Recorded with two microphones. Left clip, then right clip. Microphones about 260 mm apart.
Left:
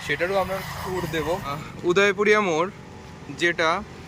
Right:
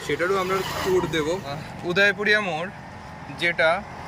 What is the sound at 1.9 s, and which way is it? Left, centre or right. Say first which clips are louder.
Speech: left 1 dB; centre.